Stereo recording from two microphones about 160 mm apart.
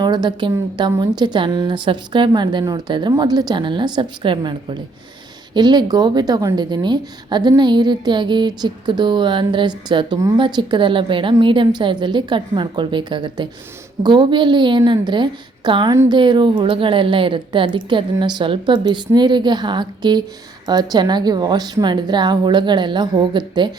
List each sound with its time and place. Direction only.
0.0 s a woman's voice: 25° right (ahead or behind)